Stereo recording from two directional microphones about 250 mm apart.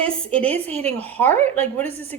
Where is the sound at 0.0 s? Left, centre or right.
Centre.